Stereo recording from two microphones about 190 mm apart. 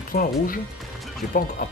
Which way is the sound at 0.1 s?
50° left (ahead or behind).